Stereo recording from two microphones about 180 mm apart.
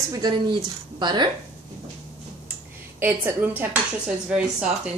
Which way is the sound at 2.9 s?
10° right (ahead or behind).